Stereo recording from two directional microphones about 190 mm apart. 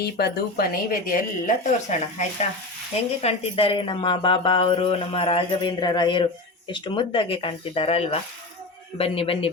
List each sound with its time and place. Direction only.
0.0 s speech: 55° left (ahead or behind); by 9.5 s 30° left (ahead or behind)